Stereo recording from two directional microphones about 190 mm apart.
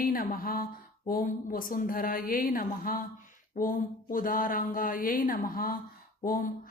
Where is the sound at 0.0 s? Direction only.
45° left (ahead or behind).